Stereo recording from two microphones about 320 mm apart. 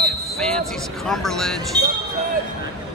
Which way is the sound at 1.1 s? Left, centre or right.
Centre.